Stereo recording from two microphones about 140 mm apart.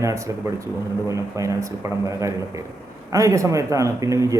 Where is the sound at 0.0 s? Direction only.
20° right (ahead or behind).